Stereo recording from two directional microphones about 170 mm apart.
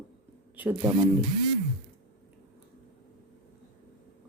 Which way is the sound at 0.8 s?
25° right (ahead or behind).